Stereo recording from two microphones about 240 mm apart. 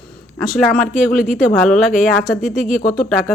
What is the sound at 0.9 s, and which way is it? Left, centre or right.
Speech, left.